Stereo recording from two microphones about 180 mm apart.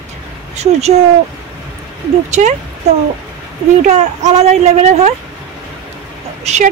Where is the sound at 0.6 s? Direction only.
35° right (ahead or behind).